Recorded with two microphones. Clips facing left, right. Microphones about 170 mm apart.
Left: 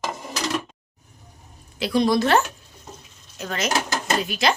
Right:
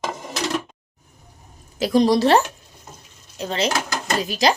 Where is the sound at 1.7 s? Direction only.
40° right (ahead or behind).